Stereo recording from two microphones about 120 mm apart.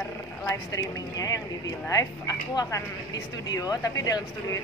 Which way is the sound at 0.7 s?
30° left (ahead or behind).